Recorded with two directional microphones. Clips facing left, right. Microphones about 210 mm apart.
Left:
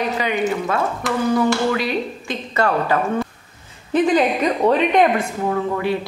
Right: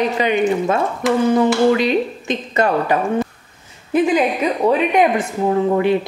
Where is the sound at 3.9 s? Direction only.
10° right (ahead or behind).